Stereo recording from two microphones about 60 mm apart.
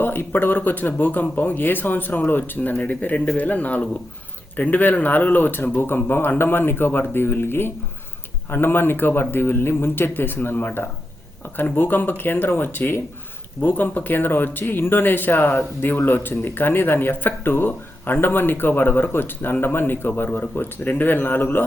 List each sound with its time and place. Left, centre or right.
0.0 s speech: left